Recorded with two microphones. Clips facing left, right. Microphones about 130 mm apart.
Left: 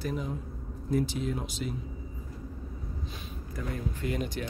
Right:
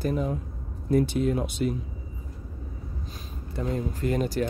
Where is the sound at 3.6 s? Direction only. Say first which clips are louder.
Right 6 dB; 35° right (ahead or behind).